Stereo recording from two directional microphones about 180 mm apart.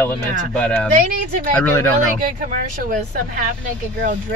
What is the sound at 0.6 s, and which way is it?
Speech, 5° left (ahead or behind).